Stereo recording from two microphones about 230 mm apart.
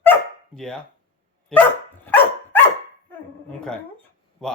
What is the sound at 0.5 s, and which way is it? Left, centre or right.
Speech, centre.